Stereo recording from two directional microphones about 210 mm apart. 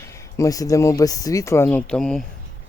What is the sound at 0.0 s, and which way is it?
Speech, 15° left (ahead or behind).